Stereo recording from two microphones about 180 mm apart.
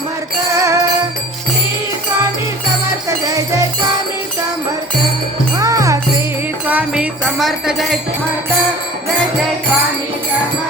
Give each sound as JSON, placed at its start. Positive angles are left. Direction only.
{"t": 0.6, "sound": "music", "side_deg": -15}
{"t": 3.3, "sound": "music", "side_deg": -15}
{"t": 5.5, "sound": "music", "side_deg": -20}
{"t": 6.7, "sound": "wind chime", "side_deg": -10}